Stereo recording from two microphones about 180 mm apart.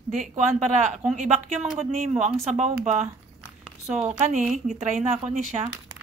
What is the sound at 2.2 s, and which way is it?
A woman's voice, 40° right (ahead or behind).